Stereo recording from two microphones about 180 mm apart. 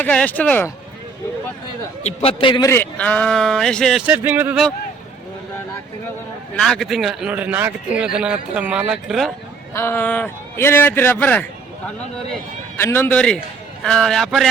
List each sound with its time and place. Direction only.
0.0 s a man's voice: 10° left (ahead or behind)
2.2 s a man's voice: 25° left (ahead or behind)
2.6 s speech: 10° left (ahead or behind)
4.0 s speech: 10° right (ahead or behind)
6.6 s speech: centre (ahead or behind)
9.7 s a man's voice: 10° left (ahead or behind)
12.7 s a man's voice: 15° left (ahead or behind)